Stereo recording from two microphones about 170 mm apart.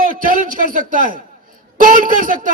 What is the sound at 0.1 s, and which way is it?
A man's voice, 55° right (ahead or behind).